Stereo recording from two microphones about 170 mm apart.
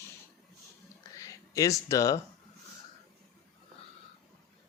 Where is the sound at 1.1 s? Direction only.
20° left (ahead or behind).